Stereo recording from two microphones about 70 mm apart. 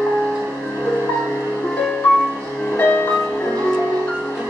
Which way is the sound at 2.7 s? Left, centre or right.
Left.